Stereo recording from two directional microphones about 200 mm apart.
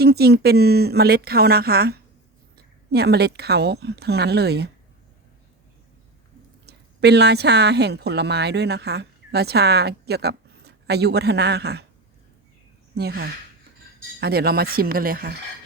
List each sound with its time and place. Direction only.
0.0 s a woman's voice: 55° right (ahead or behind)
6.7 s speech: 55° right (ahead or behind)
13.0 s a woman's voice: 55° right (ahead or behind)